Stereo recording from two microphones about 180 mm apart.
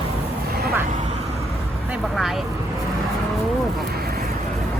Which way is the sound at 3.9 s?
60° right (ahead or behind).